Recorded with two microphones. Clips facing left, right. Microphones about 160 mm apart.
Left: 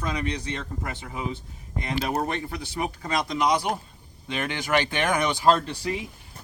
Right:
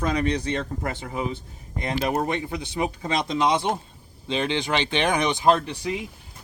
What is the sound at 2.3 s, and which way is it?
Speech, 20° right (ahead or behind).